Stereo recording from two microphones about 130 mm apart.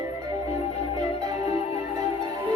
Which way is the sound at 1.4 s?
50° left (ahead or behind).